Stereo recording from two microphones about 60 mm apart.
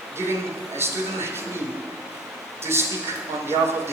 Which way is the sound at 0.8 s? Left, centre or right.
Right.